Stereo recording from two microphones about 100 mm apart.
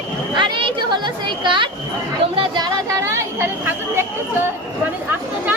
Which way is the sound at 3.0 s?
30° right (ahead or behind).